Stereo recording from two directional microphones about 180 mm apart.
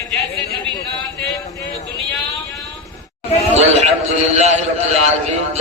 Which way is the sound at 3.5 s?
35° right (ahead or behind).